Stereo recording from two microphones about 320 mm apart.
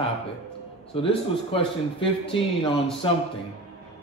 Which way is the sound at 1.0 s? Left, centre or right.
Centre.